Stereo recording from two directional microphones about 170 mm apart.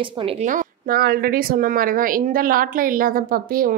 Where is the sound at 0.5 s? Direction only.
55° right (ahead or behind).